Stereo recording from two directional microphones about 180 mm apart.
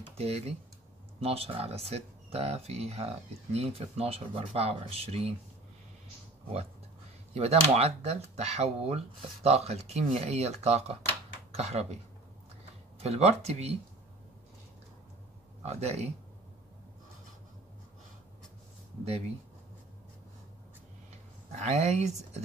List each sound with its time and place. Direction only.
0.2 s speech: 35° right (ahead or behind)
7.3 s speech: 35° right (ahead or behind)
13.0 s speech: 35° right (ahead or behind)
15.6 s speech: 35° right (ahead or behind)
19.0 s speech: 35° right (ahead or behind)
21.5 s speech: 40° right (ahead or behind)